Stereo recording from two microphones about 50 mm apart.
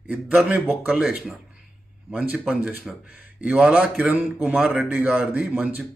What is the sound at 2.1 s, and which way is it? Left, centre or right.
Speech, right.